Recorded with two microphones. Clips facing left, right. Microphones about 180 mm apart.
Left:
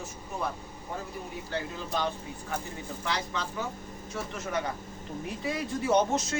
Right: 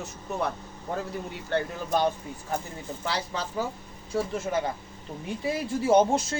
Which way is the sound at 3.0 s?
35° right (ahead or behind).